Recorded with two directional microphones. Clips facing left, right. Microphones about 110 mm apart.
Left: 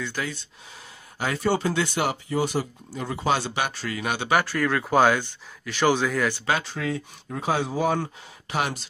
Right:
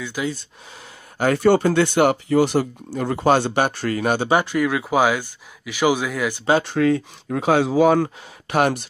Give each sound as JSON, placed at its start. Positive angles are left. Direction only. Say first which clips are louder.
{"t": 0.0, "sound": "speech", "louder": "right 4 dB", "side_deg": -10}
{"t": 1.1, "sound": "speech", "louder": "right 8 dB", "side_deg": -55}
{"t": 4.3, "sound": "speech", "louder": "even", "side_deg": -20}
{"t": 6.6, "sound": "speech", "louder": "right 11 dB", "side_deg": -60}
{"t": 8.5, "sound": "speech", "louder": "right 8 dB", "side_deg": -55}